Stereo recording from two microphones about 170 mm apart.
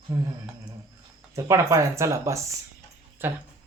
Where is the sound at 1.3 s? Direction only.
20° right (ahead or behind).